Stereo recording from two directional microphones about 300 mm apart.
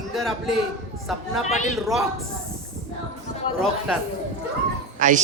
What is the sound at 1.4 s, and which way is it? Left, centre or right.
Speech, left.